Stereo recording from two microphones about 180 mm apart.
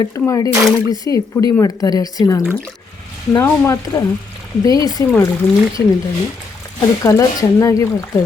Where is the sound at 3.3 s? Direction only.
15° left (ahead or behind).